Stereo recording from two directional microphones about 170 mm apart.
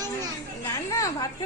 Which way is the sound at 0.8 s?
20° left (ahead or behind).